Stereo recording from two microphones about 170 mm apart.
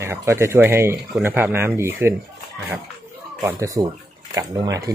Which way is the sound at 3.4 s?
20° right (ahead or behind).